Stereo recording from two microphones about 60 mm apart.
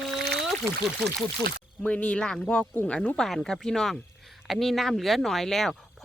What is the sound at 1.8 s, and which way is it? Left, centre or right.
Speech, left.